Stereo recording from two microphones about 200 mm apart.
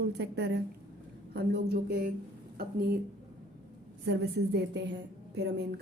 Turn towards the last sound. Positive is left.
turn(degrees=-60)  # may be behind; listen again after turning